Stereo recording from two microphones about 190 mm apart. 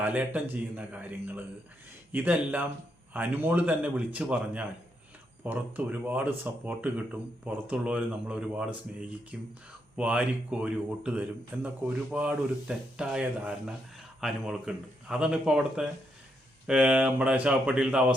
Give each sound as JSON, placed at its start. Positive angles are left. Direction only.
{"t": 0.0, "sound": "speech", "side_deg": -10}